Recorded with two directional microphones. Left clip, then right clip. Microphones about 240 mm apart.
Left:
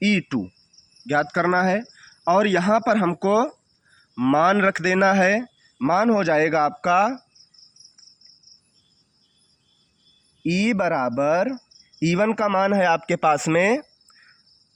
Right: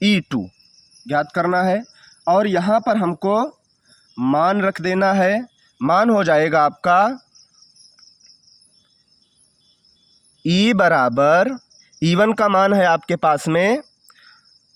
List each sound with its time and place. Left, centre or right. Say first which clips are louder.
0.0 s speech: right 3 dB; right
10.8 s speech: right 8 dB; right